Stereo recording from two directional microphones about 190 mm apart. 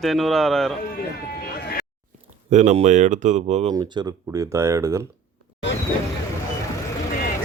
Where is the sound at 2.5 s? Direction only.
40° right (ahead or behind).